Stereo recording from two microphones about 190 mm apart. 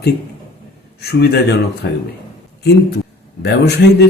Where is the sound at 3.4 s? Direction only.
60° left (ahead or behind).